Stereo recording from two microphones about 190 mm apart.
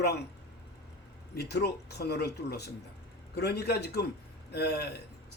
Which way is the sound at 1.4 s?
60° left (ahead or behind).